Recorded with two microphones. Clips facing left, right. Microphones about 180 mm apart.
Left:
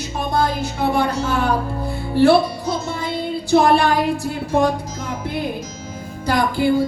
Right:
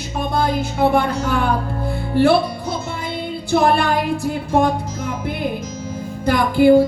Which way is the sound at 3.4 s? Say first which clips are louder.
Left 2 dB; 55° right (ahead or behind).